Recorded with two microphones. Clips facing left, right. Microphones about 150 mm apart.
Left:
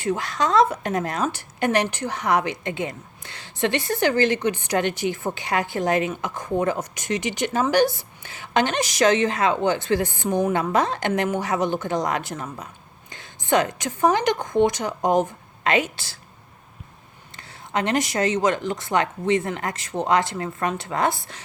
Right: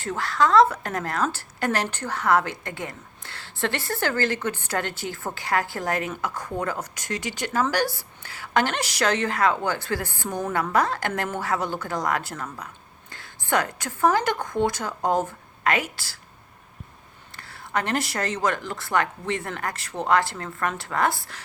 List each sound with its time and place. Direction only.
0.0 s a woman's voice: 15° left (ahead or behind)
17.3 s a woman's voice: 20° left (ahead or behind)